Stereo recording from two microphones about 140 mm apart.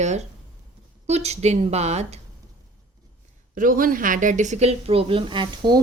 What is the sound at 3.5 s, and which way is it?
A woman's voice, 75° right (ahead or behind).